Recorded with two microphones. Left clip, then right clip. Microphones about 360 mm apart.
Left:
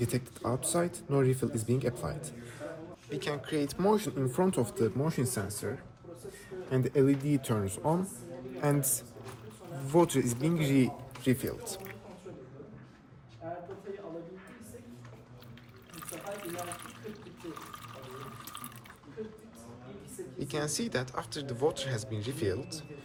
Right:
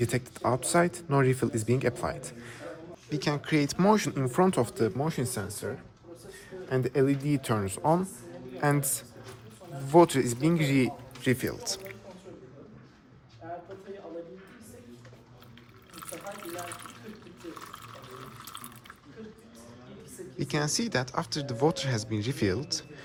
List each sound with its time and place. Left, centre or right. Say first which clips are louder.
0.0 s speech: right 5 dB; centre
5.0 s speech: right 1 dB; centre
6.7 s speech: right 1 dB; centre
9.9 s speech: right 6 dB; right
13.5 s a sound: right 1 dB; centre
16.0 s water: right 1 dB; centre
20.4 s speech: right 4 dB; centre